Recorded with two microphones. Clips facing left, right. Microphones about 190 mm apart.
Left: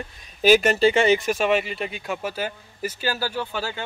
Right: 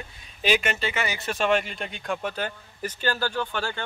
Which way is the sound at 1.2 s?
5° left (ahead or behind).